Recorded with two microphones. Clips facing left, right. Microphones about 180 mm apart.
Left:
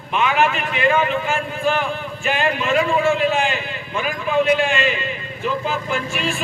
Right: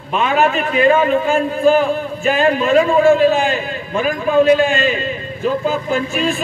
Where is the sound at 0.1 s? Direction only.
40° right (ahead or behind).